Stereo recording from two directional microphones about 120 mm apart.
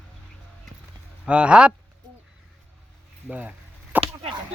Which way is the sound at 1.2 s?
10° right (ahead or behind).